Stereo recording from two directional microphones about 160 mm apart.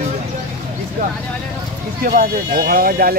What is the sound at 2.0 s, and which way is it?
Speech, 65° right (ahead or behind).